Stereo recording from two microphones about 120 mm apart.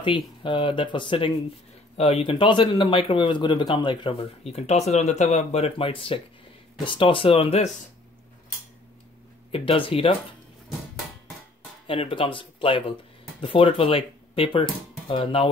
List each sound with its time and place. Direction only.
0.0 s speech: 40° left (ahead or behind)
2.0 s speech: 55° left (ahead or behind)
9.5 s speech: 50° left (ahead or behind)
11.9 s speech: 45° left (ahead or behind)